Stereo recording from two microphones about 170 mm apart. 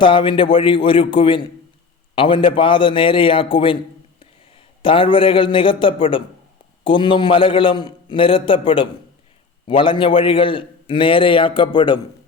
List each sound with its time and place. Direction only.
0.0 s a man's voice: 30° left (ahead or behind)
4.8 s a man's voice: 30° left (ahead or behind)